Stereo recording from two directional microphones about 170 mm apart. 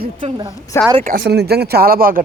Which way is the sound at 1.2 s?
75° right (ahead or behind).